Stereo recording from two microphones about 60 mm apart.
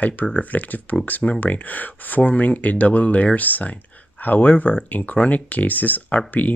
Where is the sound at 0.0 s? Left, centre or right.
Left.